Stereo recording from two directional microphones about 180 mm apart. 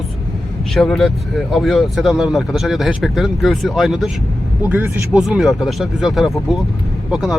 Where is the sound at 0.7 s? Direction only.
Centre (ahead or behind).